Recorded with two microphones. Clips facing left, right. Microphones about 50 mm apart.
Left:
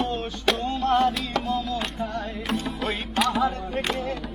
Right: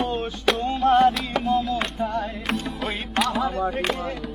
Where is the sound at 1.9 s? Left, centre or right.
Centre.